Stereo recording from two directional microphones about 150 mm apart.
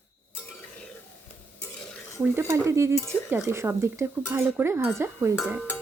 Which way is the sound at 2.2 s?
15° right (ahead or behind).